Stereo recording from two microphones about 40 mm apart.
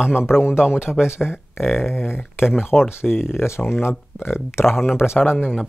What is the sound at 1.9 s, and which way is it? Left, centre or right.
Speech, left.